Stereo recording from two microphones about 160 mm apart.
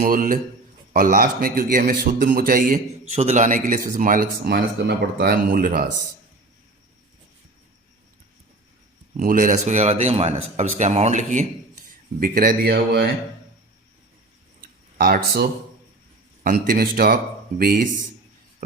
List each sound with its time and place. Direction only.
0.0 s speech: 55° right (ahead or behind)
3.1 s speech: 45° right (ahead or behind); by 5.9 s 60° right (ahead or behind)
9.1 s speech: 60° right (ahead or behind)
12.2 s speech: 60° right (ahead or behind); by 13.1 s 90° right
14.6 s a sound: 65° right (ahead or behind)
16.4 s speech: 65° right (ahead or behind)